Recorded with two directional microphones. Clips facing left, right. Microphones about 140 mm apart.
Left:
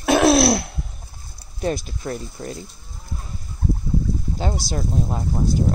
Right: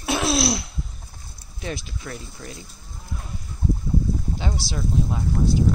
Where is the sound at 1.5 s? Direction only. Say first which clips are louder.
Left 8 dB; 45° left (ahead or behind).